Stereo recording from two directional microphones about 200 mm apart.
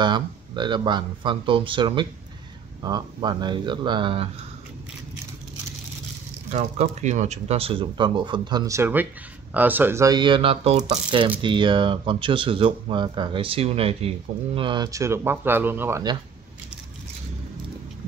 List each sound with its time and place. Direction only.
0.0 s speech: 25° right (ahead or behind)
6.5 s speech: 35° right (ahead or behind); by 16.2 s 15° right (ahead or behind)